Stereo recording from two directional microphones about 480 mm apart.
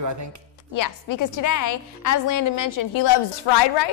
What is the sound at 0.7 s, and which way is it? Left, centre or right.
A woman's voice, left.